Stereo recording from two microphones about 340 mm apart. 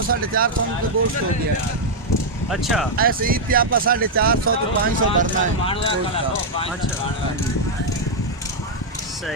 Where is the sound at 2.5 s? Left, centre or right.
Centre.